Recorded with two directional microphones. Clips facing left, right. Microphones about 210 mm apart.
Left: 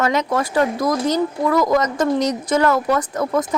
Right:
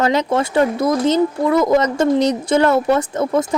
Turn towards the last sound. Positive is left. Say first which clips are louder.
# right 2 dB
turn(degrees=-25)  # may be behind; listen again after turning